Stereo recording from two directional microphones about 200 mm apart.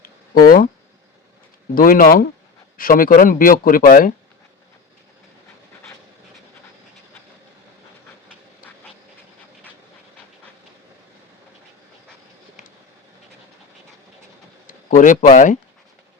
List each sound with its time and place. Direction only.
0.4 s speech: 45° left (ahead or behind)
1.7 s speech: 45° left (ahead or behind)
14.7 s speech: 40° left (ahead or behind)